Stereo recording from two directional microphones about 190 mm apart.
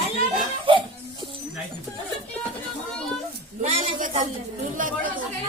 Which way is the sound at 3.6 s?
40° right (ahead or behind).